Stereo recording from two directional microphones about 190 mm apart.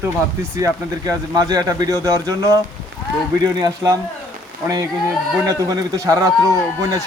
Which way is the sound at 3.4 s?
20° right (ahead or behind).